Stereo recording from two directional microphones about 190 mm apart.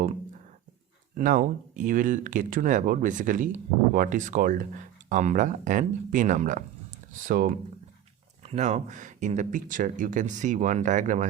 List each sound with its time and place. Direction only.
1.1 s speech: 45° right (ahead or behind)